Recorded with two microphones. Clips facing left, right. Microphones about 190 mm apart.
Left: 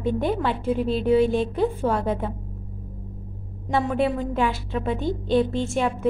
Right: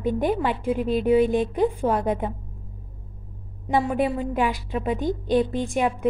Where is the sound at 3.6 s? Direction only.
10° right (ahead or behind).